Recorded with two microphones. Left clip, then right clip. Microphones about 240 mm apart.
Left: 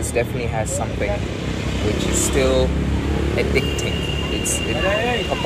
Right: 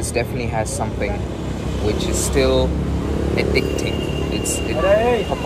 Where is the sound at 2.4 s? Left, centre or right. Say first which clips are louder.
Right 2 dB; centre.